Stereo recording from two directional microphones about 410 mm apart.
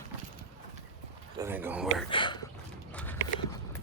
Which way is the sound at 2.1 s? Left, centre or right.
Centre.